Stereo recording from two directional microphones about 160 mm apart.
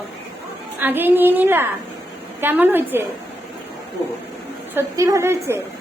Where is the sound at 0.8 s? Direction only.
10° right (ahead or behind).